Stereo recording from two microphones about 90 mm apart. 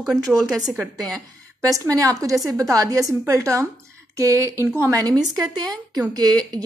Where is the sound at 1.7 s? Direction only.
40° right (ahead or behind).